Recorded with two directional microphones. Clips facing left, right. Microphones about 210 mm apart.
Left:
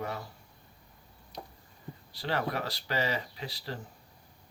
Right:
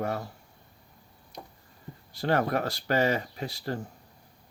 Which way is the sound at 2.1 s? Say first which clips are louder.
Right 6 dB; 50° right (ahead or behind).